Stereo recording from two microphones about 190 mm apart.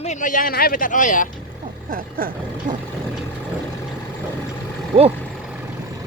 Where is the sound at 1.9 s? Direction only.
50° right (ahead or behind).